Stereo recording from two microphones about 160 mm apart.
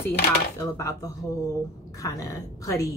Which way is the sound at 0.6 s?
20° left (ahead or behind).